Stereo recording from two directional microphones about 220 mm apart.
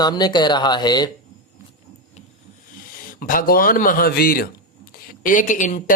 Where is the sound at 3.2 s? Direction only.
40° left (ahead or behind).